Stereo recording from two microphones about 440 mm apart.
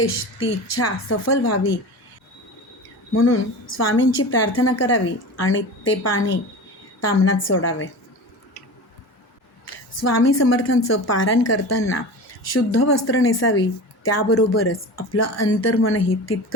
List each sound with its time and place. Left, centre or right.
0.0 s speech: left
3.2 s speech: left
9.6 s speech: left